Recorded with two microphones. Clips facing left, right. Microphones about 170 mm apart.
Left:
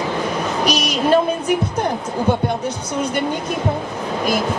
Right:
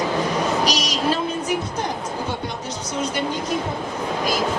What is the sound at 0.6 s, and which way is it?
Music, 55° left (ahead or behind).